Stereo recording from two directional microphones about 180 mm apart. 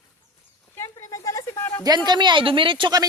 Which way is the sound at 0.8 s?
20° left (ahead or behind).